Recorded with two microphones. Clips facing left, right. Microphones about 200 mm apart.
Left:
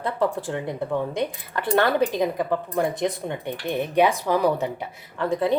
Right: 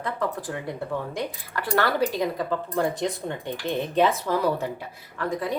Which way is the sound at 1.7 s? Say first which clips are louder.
Left 3 dB; 20° left (ahead or behind).